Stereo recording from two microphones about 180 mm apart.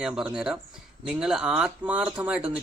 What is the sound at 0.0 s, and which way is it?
Speech, 5° right (ahead or behind).